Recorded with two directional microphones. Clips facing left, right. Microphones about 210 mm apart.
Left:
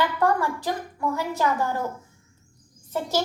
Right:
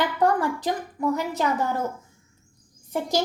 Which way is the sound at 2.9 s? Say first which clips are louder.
Right 1 dB; 15° right (ahead or behind).